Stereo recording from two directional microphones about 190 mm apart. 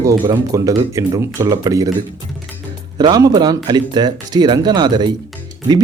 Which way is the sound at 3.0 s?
20° right (ahead or behind).